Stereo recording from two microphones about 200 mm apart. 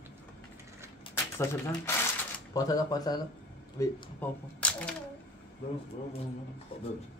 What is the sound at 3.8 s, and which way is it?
Speech, 10° left (ahead or behind).